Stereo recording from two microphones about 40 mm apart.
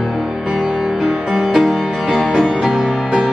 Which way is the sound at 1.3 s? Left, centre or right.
Centre.